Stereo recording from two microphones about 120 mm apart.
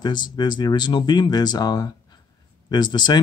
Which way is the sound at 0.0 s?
40° left (ahead or behind).